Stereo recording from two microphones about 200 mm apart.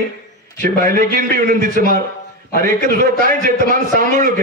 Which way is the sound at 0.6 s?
45° right (ahead or behind).